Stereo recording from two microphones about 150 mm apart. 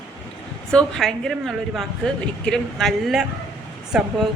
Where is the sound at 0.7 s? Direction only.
5° left (ahead or behind).